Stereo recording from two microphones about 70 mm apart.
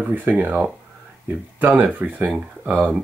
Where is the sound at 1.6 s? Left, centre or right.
Right.